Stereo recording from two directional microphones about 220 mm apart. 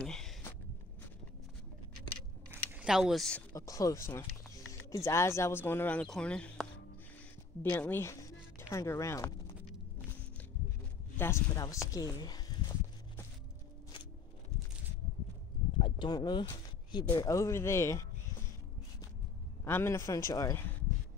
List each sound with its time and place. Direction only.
0.0 s a sound: centre (ahead or behind)
2.7 s speech: 5° right (ahead or behind)
7.7 s speech: 10° left (ahead or behind)
11.1 s speech: 10° left (ahead or behind)
15.8 s a sound: 20° left (ahead or behind)
17.1 s speech: 15° left (ahead or behind)
19.6 s speech: 10° left (ahead or behind)